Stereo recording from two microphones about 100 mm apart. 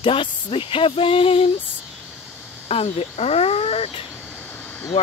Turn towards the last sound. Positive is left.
turn(degrees=10)  # may be behind; listen again after turning